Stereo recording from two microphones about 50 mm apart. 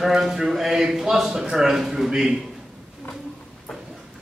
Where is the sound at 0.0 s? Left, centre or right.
Centre.